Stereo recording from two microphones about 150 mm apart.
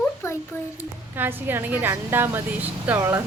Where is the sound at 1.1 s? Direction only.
15° right (ahead or behind).